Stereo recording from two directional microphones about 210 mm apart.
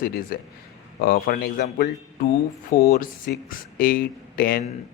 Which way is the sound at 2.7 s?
45° left (ahead or behind).